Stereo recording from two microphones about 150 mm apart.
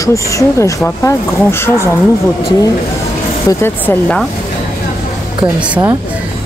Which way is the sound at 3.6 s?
15° left (ahead or behind).